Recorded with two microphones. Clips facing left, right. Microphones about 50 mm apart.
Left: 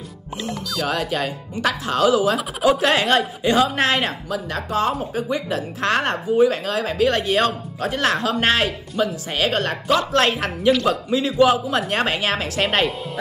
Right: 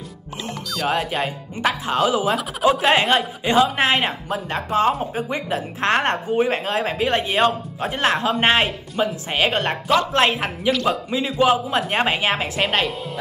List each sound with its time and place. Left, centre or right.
0.6 s music: centre
0.8 s speech: right
4.3 s speech: right
10.7 s speech: centre
11.1 s speech: centre
12.6 s speech: centre